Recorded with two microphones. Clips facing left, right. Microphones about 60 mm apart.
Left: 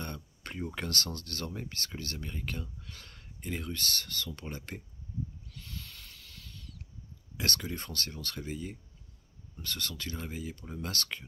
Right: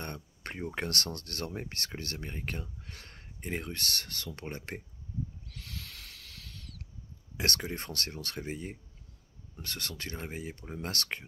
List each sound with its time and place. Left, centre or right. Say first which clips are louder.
0.0 s a sound: right 1 dB; right
0.7 s speech: right 2 dB; right
3.7 s speech: left 1 dB; right
5.5 s owl: right 1 dB; right
7.3 s speech: right 1 dB; right
8.4 s speech: right 1 dB; right
9.7 s speech: left 2 dB; right
10.1 s speech: even; right